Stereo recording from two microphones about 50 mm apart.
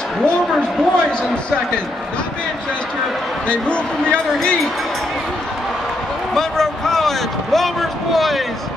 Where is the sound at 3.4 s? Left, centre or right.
Left.